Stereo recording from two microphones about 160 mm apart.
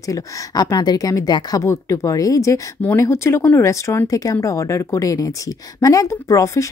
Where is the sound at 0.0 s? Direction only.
20° left (ahead or behind).